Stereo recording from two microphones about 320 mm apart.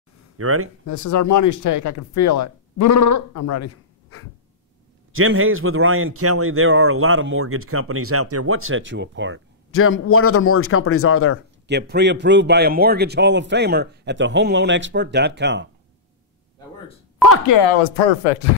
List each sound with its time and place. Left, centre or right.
0.4 s speech: right
0.8 s speech: left
5.1 s a man's voice: right
9.7 s a man's voice: left
11.6 s a man's voice: right
17.5 s speech: left